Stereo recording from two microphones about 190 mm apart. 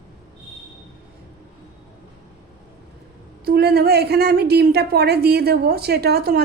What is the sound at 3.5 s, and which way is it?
A woman's voice, 55° right (ahead or behind).